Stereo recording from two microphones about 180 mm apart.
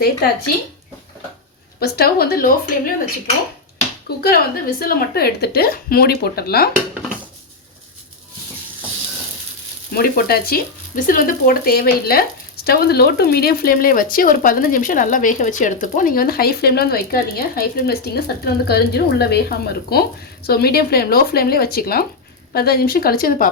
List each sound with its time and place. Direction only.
1.8 s speech: 60° left (ahead or behind)
9.9 s speech: 55° left (ahead or behind)